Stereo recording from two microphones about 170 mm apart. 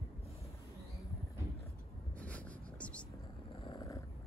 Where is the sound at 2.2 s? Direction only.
10° left (ahead or behind).